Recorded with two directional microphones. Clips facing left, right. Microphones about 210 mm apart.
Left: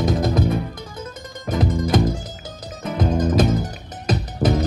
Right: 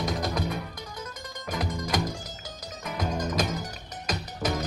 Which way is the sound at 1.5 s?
25° left (ahead or behind).